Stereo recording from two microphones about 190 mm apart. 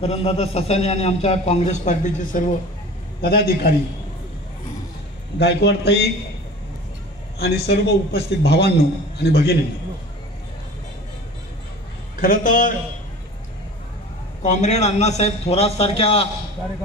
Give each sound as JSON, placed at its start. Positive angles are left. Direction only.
{"t": 0.0, "sound": "a man's voice", "side_deg": 30}
{"t": 3.2, "sound": "a man's voice", "side_deg": 55}
{"t": 5.4, "sound": "a man's voice", "side_deg": 65}
{"t": 7.3, "sound": "a man's voice", "side_deg": 55}
{"t": 12.2, "sound": "a man's voice", "side_deg": 45}
{"t": 14.4, "sound": "a man's voice", "side_deg": 40}